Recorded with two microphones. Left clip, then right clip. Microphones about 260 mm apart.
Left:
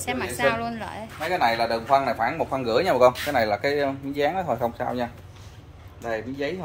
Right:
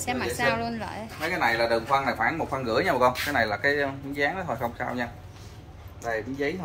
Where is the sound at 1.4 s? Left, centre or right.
Left.